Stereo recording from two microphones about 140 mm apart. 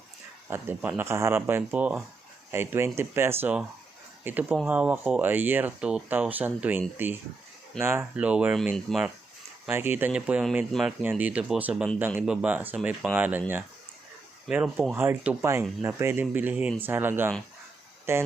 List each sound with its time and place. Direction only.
0.5 s speech: 15° right (ahead or behind); by 9.0 s centre (ahead or behind)
9.6 s speech: 15° right (ahead or behind)
14.4 s speech: 10° right (ahead or behind)